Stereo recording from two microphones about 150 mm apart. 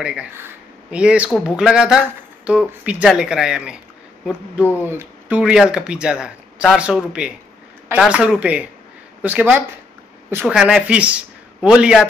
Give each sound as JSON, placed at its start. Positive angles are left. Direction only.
{"t": 0.0, "sound": "speech", "side_deg": -5}
{"t": 4.8, "sound": "speech", "side_deg": -15}
{"t": 5.4, "sound": "speech", "side_deg": -5}